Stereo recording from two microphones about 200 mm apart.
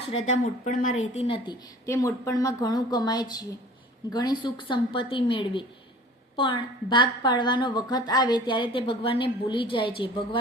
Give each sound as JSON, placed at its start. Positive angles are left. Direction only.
{"t": 0.3, "sound": "a woman's voice", "side_deg": 40}
{"t": 1.9, "sound": "a woman's voice", "side_deg": 15}